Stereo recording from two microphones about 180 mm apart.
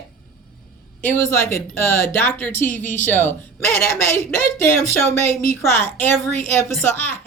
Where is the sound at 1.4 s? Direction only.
15° left (ahead or behind).